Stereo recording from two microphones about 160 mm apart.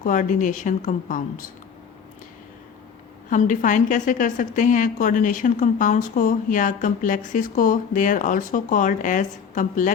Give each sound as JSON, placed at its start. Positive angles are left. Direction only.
{"t": 0.0, "sound": "a woman's voice", "side_deg": 50}
{"t": 3.2, "sound": "a woman's voice", "side_deg": 55}